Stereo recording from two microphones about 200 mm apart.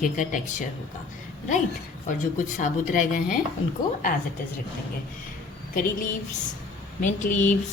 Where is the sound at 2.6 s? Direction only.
40° left (ahead or behind).